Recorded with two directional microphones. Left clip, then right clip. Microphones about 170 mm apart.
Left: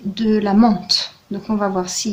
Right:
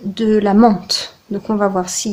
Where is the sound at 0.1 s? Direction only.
30° right (ahead or behind).